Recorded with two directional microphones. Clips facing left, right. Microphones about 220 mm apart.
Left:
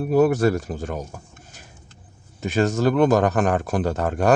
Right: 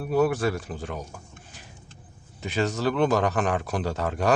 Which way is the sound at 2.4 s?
45° left (ahead or behind).